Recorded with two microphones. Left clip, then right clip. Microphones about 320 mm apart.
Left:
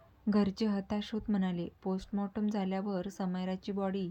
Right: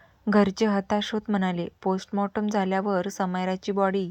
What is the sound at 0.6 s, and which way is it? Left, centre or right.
Speech, right.